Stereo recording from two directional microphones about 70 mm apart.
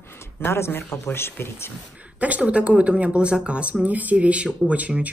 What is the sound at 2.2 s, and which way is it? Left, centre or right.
Speech, centre.